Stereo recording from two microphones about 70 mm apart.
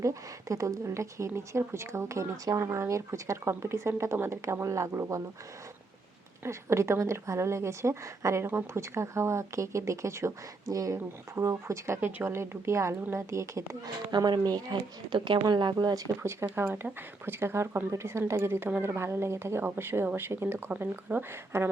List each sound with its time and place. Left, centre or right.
0.0 s speech: right
6.4 s speech: right
8.4 s speech: right
13.8 s speech: right
16.2 s speech: right